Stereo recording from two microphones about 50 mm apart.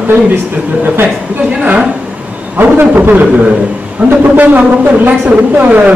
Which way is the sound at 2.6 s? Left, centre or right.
Right.